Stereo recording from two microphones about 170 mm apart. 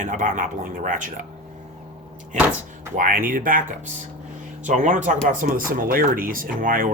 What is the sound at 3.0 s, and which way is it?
Speech, 55° right (ahead or behind).